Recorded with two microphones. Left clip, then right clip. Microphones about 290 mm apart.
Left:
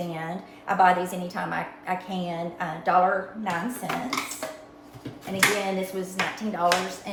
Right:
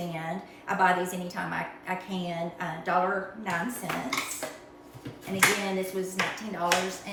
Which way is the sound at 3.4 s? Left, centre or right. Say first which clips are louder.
Left 2 dB; centre.